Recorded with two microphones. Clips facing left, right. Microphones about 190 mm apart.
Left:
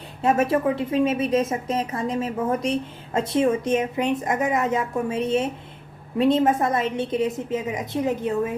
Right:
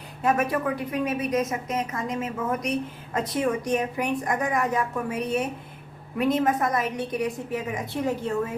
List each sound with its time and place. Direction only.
0.2 s a woman's voice: 25° left (ahead or behind)